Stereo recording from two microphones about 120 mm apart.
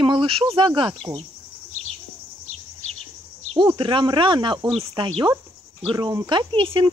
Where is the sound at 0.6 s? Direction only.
40° right (ahead or behind).